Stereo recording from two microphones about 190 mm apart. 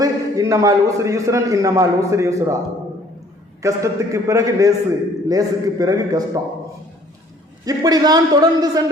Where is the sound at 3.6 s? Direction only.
15° right (ahead or behind).